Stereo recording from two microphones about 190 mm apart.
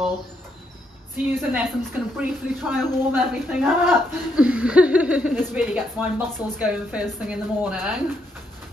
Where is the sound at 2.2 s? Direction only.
10° right (ahead or behind).